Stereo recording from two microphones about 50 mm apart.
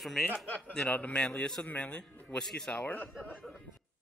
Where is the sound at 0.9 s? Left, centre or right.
Left.